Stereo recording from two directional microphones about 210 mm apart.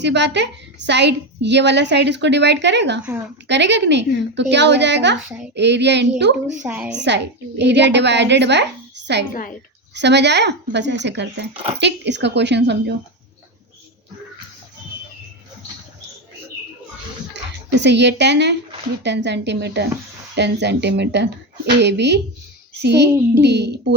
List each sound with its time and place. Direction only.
0.0 s a woman's voice: 55° right (ahead or behind)
3.0 s a woman's voice: 5° right (ahead or behind)
3.4 s a woman's voice: 55° right (ahead or behind)
6.6 s a woman's voice: 5° right (ahead or behind)
6.9 s a woman's voice: 55° right (ahead or behind)
17.3 s a woman's voice: 55° right (ahead or behind)